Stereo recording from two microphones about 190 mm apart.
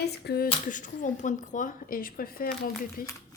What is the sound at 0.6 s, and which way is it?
A woman's voice, 40° left (ahead or behind).